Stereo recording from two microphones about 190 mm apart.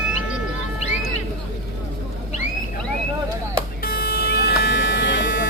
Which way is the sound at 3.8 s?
50° left (ahead or behind).